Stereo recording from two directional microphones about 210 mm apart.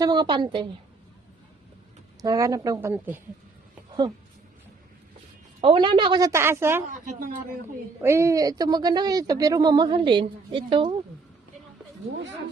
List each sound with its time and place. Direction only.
0.0 s speech: 20° right (ahead or behind)
2.2 s a woman's voice: 15° right (ahead or behind)
5.5 s a woman's voice: 25° right (ahead or behind)
6.8 s a woman's voice: 35° right (ahead or behind)
8.0 s speech: 15° right (ahead or behind)